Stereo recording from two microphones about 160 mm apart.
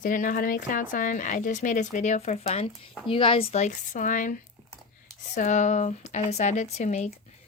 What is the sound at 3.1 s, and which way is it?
Speech, 35° left (ahead or behind).